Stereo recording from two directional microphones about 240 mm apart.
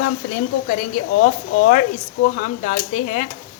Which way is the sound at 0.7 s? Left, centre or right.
Left.